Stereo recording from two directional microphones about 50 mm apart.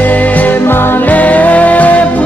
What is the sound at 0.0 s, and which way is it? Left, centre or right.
Music, left.